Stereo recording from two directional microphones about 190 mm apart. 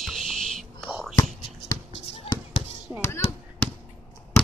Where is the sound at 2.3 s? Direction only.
30° left (ahead or behind).